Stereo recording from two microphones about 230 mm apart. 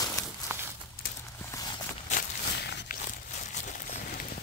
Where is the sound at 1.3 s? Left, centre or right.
Centre.